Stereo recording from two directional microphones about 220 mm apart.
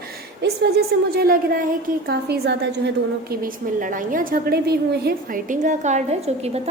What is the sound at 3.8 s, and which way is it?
A woman's voice, 40° right (ahead or behind).